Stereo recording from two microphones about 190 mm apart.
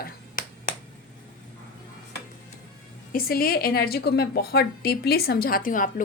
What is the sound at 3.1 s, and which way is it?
A woman's voice, 50° left (ahead or behind).